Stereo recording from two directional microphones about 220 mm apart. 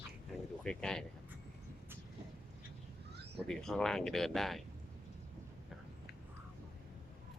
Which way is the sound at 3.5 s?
5° left (ahead or behind).